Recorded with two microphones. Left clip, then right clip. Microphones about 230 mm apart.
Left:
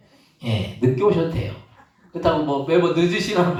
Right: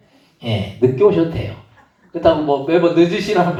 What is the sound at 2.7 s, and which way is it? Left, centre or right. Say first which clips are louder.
Speech: right 4 dB; left.